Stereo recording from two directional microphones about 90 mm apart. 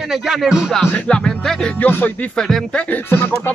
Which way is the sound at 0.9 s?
10° left (ahead or behind).